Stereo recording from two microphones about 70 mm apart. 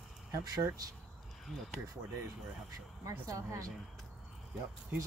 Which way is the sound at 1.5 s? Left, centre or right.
Centre.